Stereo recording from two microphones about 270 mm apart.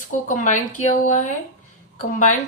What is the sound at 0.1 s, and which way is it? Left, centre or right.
A woman's voice, left.